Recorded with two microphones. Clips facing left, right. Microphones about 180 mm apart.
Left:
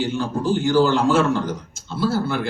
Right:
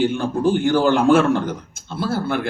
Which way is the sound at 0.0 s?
55° right (ahead or behind).